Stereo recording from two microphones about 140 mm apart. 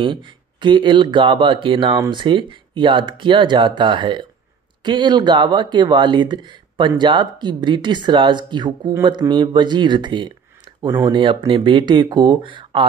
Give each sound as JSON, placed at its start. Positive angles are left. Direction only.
{"t": 0.0, "sound": "speech", "side_deg": -35}